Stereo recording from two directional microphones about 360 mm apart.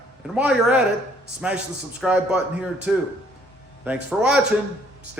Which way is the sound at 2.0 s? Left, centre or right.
Centre.